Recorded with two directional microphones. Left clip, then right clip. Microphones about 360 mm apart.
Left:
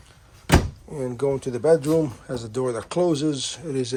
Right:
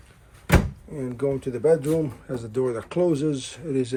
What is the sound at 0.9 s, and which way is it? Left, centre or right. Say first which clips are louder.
Speech: left 2 dB; centre.